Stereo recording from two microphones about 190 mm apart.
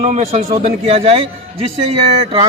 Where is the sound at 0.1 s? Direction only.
35° right (ahead or behind).